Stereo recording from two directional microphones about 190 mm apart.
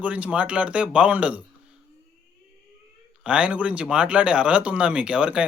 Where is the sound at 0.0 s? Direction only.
5° right (ahead or behind).